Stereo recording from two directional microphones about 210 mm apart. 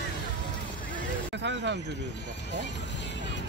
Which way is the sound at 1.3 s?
55° right (ahead or behind).